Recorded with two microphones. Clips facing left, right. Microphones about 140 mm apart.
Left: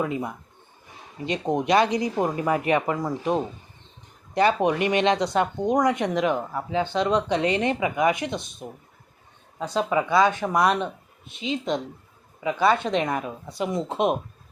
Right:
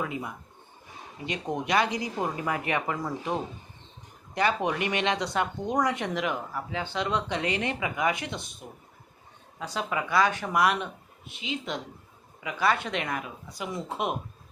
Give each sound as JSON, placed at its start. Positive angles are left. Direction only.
{"t": 1.3, "sound": "speech", "side_deg": 20}